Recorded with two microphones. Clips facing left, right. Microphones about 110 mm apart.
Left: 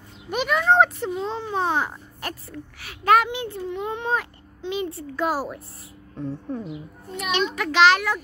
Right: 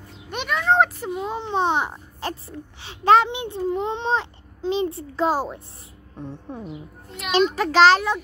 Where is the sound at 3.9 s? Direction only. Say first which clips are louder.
Right 2 dB; 25° right (ahead or behind).